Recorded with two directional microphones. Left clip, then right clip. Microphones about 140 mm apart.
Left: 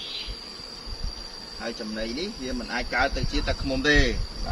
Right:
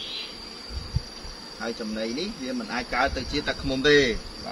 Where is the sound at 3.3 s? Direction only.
35° right (ahead or behind).